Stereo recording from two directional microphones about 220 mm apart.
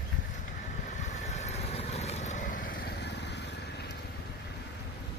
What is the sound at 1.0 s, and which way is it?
Vehicle, 30° left (ahead or behind).